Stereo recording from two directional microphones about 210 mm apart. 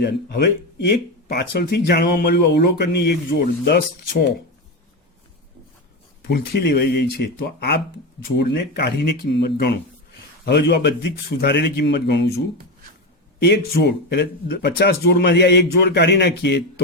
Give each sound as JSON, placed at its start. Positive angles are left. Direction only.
{"t": 0.0, "sound": "speech", "side_deg": 50}
{"t": 6.2, "sound": "speech", "side_deg": 50}
{"t": 13.4, "sound": "speech", "side_deg": 50}